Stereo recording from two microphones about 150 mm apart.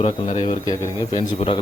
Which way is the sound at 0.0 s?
45° left (ahead or behind).